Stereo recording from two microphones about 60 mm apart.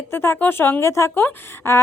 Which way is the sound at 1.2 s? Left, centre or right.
Left.